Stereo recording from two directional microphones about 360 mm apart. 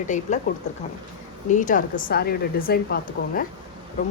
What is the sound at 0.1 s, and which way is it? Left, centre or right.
Speech, centre.